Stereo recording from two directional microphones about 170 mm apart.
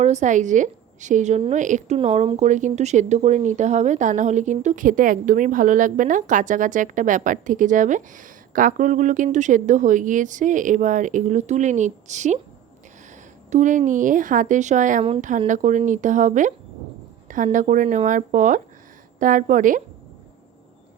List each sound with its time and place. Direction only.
0.0 s speech: 45° right (ahead or behind)
2.0 s speech: 35° right (ahead or behind)
13.5 s speech: 45° right (ahead or behind)
15.0 s speech: 35° right (ahead or behind)
15.4 s speech: 45° right (ahead or behind)